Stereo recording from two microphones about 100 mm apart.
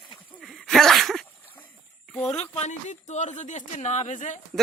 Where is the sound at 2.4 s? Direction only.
90° left.